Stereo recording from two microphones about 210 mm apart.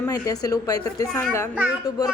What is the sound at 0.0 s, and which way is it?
A woman's voice, 15° left (ahead or behind).